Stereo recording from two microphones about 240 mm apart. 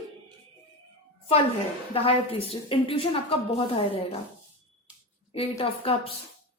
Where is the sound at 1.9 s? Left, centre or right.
Left.